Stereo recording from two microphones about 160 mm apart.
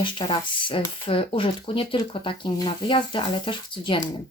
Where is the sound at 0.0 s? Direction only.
30° left (ahead or behind).